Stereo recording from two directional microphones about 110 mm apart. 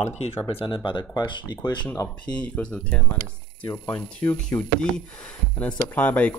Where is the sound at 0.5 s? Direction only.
50° left (ahead or behind).